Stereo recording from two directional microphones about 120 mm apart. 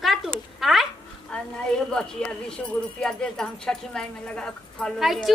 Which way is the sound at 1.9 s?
5° left (ahead or behind).